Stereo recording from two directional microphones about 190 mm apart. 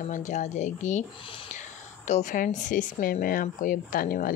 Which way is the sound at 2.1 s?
40° left (ahead or behind).